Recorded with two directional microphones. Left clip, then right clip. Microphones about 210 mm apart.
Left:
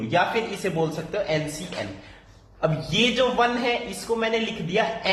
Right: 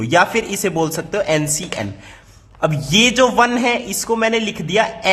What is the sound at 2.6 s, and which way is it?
A woman's voice, 35° right (ahead or behind).